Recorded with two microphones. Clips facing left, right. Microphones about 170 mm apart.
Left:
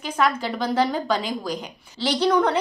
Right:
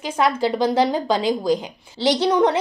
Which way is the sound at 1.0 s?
30° right (ahead or behind).